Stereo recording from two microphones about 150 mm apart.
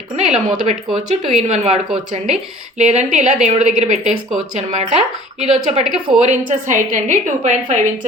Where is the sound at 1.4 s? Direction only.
45° right (ahead or behind).